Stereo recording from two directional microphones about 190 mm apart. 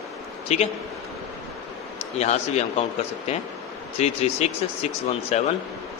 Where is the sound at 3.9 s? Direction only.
35° left (ahead or behind).